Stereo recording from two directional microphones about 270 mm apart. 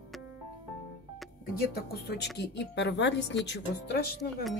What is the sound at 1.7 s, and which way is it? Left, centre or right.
A woman's voice, left.